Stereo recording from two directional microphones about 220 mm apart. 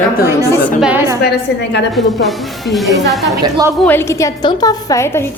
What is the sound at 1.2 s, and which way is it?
Speech, 50° left (ahead or behind).